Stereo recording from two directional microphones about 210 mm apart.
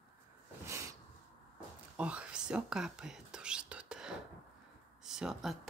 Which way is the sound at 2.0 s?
5° right (ahead or behind).